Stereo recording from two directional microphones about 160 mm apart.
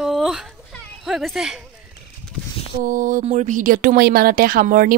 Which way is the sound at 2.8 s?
55° right (ahead or behind).